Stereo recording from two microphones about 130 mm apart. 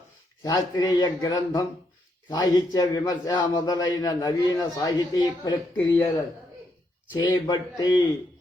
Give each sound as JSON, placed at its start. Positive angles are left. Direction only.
{"t": 0.4, "sound": "a man's voice", "side_deg": 30}